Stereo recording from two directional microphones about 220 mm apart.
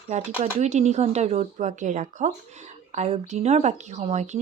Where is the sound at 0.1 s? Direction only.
30° right (ahead or behind).